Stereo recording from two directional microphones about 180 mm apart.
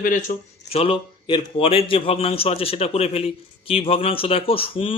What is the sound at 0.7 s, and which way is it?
A man's voice, 30° left (ahead or behind).